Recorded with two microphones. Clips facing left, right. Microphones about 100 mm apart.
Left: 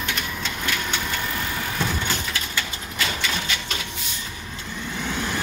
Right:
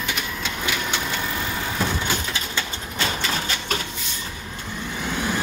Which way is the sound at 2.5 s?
30° right (ahead or behind).